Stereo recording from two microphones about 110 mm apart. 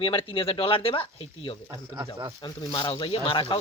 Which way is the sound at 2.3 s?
40° left (ahead or behind).